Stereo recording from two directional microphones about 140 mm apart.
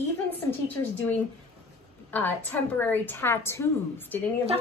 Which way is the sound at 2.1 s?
15° left (ahead or behind).